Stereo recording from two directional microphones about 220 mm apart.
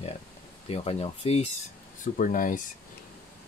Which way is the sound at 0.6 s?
25° left (ahead or behind).